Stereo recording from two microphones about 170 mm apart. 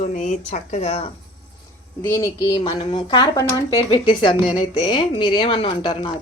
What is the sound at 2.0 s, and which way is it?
Speech, 15° left (ahead or behind).